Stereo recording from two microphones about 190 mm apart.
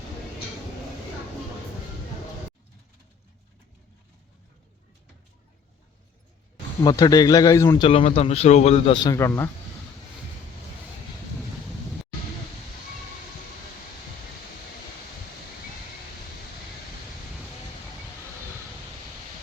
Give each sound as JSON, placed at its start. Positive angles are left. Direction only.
{"t": 6.8, "sound": "speech", "side_deg": 20}
{"t": 7.9, "sound": "a man's voice", "side_deg": 30}
{"t": 9.0, "sound": "speech", "side_deg": 15}